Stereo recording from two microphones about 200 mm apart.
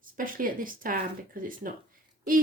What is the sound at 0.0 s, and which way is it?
A woman's voice, 45° right (ahead or behind).